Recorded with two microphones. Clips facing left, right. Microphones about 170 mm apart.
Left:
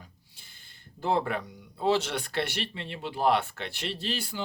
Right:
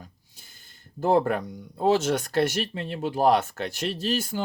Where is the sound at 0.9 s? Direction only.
45° right (ahead or behind).